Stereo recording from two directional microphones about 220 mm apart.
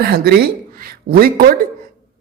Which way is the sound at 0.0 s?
45° right (ahead or behind).